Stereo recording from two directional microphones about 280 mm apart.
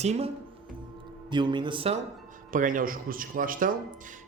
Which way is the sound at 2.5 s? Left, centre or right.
Right.